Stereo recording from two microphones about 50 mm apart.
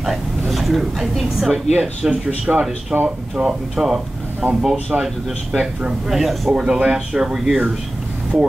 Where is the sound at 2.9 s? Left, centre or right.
Right.